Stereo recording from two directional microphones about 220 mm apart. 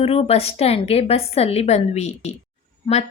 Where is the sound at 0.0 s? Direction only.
25° left (ahead or behind).